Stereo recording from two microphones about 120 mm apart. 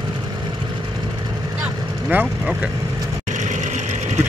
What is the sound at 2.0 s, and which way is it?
Speech, 10° right (ahead or behind).